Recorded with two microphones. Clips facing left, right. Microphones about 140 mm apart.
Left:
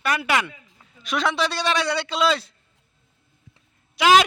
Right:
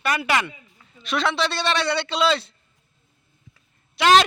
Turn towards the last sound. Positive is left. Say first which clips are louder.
# even
turn(degrees=5)  # may be behind; listen again after turning